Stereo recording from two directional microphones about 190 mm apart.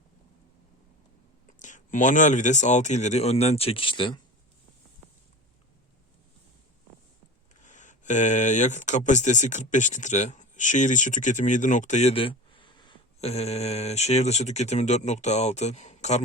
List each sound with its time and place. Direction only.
1.5 s speech: 40° left (ahead or behind)
7.6 s speech: 40° left (ahead or behind)